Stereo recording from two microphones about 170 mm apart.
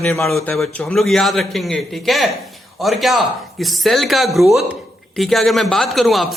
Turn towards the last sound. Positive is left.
turn(degrees=0)  # may be behind; listen again after turning